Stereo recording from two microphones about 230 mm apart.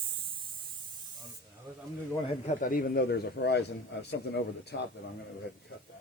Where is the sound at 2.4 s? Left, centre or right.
Left.